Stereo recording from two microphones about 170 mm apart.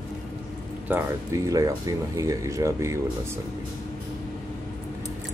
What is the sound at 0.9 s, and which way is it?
Speech, 10° right (ahead or behind).